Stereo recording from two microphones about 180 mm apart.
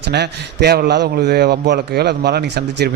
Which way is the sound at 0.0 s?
65° right (ahead or behind).